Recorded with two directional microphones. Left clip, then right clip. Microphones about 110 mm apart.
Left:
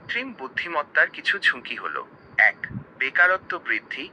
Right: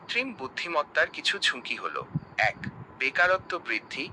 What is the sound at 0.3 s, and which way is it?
Speech, 30° right (ahead or behind).